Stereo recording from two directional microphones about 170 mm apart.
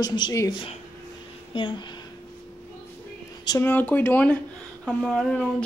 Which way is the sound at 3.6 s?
10° left (ahead or behind).